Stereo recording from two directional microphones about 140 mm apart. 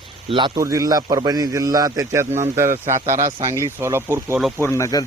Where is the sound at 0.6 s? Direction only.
25° right (ahead or behind).